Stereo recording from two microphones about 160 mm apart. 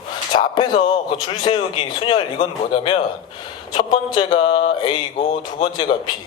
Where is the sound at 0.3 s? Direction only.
30° left (ahead or behind).